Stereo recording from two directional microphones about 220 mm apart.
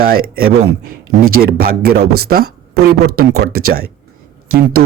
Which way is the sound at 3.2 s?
45° right (ahead or behind).